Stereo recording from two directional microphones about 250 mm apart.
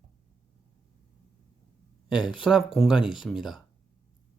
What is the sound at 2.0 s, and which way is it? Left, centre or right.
Speech, centre.